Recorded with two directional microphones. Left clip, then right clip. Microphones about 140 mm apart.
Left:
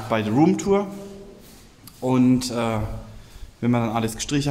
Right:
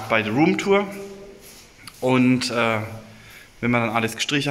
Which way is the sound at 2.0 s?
5° left (ahead or behind).